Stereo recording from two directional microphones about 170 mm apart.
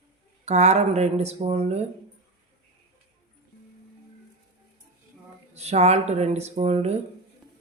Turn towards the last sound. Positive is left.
turn(degrees=-40)  # may be behind; listen again after turning